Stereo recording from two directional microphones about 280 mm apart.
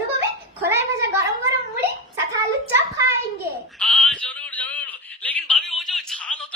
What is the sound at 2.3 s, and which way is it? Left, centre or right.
Hands, centre.